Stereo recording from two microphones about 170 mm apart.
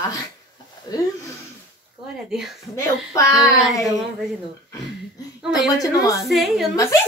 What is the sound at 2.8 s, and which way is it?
Speech, 20° left (ahead or behind).